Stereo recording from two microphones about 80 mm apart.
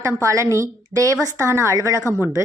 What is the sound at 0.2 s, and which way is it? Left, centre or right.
A woman's voice, right.